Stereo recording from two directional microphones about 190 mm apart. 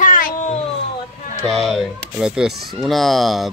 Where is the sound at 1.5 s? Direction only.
Centre (ahead or behind).